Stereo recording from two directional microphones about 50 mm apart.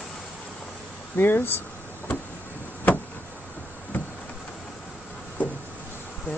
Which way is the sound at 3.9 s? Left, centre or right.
Left.